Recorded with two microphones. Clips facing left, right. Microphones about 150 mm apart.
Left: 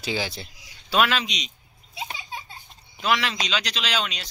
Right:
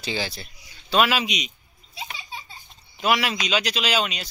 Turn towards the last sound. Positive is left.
turn(degrees=-5)  # may be behind; listen again after turning